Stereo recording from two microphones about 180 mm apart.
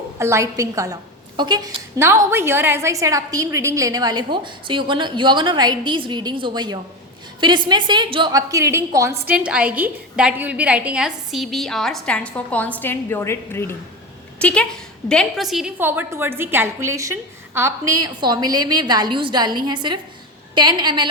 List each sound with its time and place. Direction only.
0.2 s a woman's voice: 15° right (ahead or behind)